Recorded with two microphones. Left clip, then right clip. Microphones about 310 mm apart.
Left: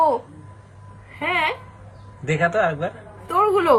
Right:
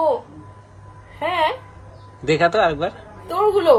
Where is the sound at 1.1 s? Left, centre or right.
Centre.